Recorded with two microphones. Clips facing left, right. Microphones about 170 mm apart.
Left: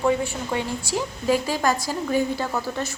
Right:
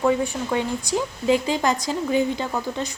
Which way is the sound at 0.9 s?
20° right (ahead or behind).